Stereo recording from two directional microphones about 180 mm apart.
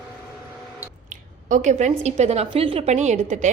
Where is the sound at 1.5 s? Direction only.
40° right (ahead or behind).